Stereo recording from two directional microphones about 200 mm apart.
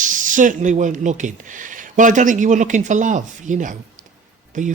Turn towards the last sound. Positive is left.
turn(degrees=-40)  # may be behind; listen again after turning